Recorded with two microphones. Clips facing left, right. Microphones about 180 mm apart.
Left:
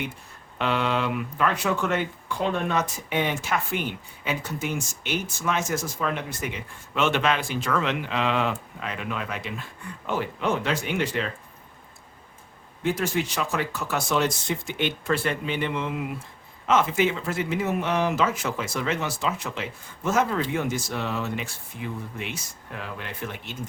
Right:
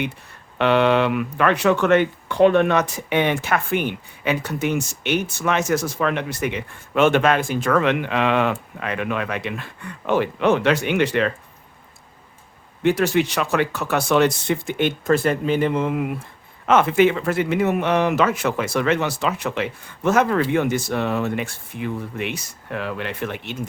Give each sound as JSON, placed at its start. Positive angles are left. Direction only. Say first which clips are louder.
{"t": 0.6, "sound": "speech", "louder": "right 8 dB", "side_deg": -70}
{"t": 12.8, "sound": "speech", "louder": "right 7 dB", "side_deg": -70}